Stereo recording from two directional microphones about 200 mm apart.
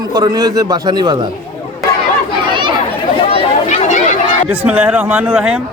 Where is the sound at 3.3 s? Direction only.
35° left (ahead or behind).